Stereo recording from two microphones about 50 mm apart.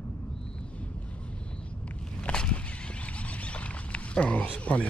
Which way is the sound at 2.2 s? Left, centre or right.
Centre.